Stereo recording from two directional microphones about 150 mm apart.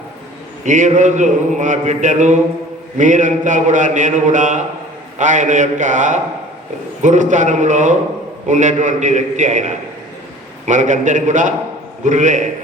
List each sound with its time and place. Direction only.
0.6 s mantra: 55° right (ahead or behind)